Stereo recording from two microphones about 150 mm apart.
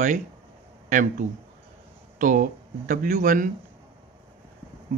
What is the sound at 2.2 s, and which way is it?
Speech, 60° right (ahead or behind).